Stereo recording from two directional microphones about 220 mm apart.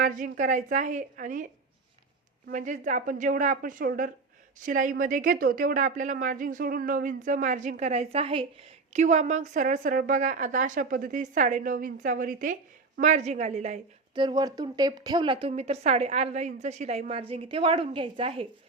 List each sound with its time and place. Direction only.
0.0 s a woman's voice: 35° right (ahead or behind)
2.5 s a woman's voice: 35° right (ahead or behind)
14.2 s a woman's voice: 20° right (ahead or behind)